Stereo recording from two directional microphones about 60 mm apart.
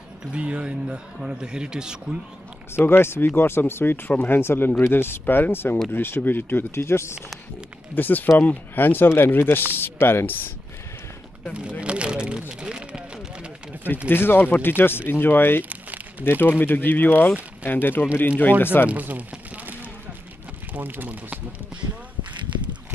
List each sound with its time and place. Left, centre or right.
0.3 s speech: centre
2.8 s speech: left
6.7 s speech: left
7.9 s speech: left
11.8 s a sound: centre
14.0 s speech: left
15.7 s crumpling: right
16.3 s speech: left
18.9 s speech: right
19.5 s a sound: right
20.7 s speech: right